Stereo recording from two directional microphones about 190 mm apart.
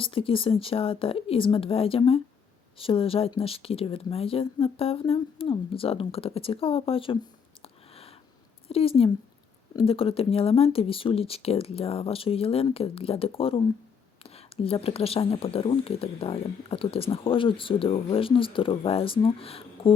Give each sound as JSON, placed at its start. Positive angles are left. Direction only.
{"t": 0.0, "sound": "speech", "side_deg": 30}
{"t": 7.6, "sound": "a sound", "side_deg": 30}
{"t": 8.7, "sound": "speech", "side_deg": 30}